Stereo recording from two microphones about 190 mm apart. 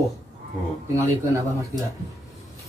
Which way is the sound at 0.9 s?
15° right (ahead or behind).